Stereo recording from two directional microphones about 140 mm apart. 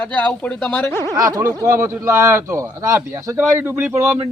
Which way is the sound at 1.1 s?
25° right (ahead or behind).